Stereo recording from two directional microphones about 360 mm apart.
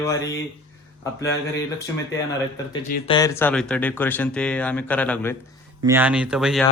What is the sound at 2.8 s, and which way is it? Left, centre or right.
Speech, left.